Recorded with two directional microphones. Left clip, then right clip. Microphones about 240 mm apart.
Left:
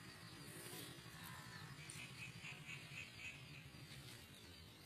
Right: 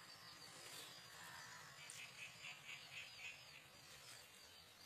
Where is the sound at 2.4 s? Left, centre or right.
Right.